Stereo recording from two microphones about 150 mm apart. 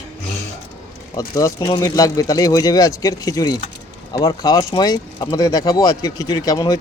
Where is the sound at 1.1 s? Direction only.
25° left (ahead or behind).